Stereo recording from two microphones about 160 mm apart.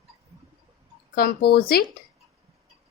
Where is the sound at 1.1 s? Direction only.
75° left (ahead or behind).